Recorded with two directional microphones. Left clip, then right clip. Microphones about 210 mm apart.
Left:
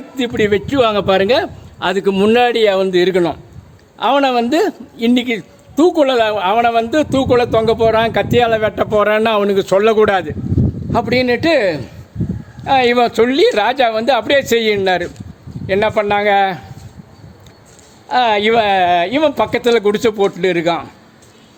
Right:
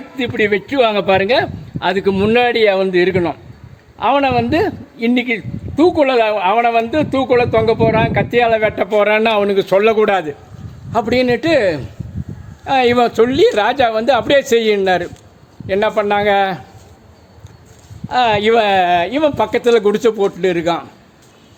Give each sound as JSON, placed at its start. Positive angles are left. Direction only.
{"t": 0.2, "sound": "a man's voice", "side_deg": 10}
{"t": 18.1, "sound": "speech", "side_deg": 20}